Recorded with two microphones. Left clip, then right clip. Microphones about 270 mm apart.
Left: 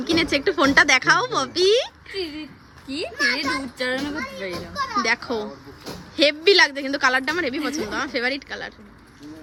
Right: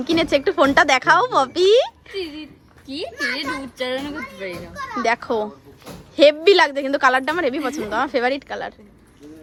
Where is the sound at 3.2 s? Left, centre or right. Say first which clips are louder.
Left 3 dB; left.